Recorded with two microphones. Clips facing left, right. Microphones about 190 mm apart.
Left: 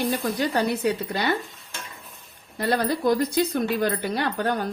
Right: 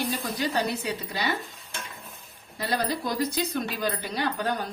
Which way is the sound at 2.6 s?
55° left (ahead or behind).